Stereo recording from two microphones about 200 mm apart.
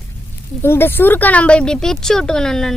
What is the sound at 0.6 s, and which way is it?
Speech, 10° left (ahead or behind).